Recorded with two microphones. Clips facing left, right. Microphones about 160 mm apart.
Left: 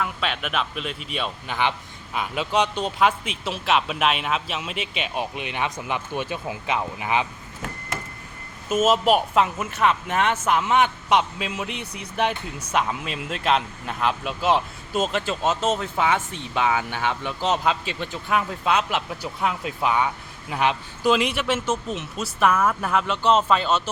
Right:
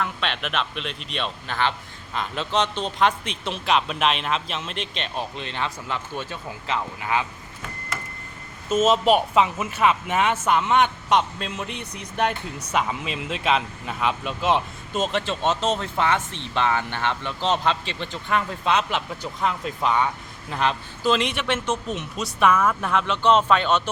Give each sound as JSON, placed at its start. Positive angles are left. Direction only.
{"t": 0.0, "sound": "speech", "side_deg": 5}
{"t": 8.7, "sound": "speech", "side_deg": 0}